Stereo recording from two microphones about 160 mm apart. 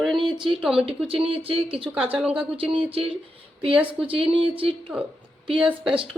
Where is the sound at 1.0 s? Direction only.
35° right (ahead or behind).